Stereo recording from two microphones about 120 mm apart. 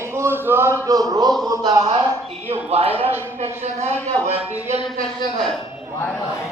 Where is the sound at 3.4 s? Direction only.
65° right (ahead or behind).